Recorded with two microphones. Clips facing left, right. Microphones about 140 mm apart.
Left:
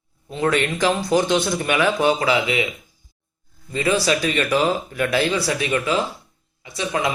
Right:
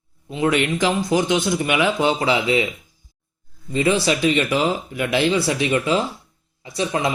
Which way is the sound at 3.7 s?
20° right (ahead or behind).